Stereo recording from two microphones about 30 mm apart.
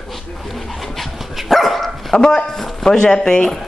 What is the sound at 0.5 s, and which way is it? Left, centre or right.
Speech, centre.